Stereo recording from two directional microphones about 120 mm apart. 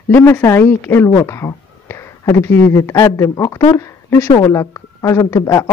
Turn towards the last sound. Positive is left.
turn(degrees=20)  # may be behind; listen again after turning